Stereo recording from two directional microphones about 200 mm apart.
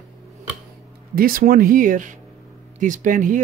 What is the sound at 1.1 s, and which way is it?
Speech, 45° right (ahead or behind).